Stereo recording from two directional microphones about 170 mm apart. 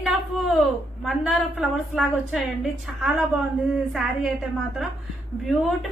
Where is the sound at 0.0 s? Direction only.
Centre (ahead or behind).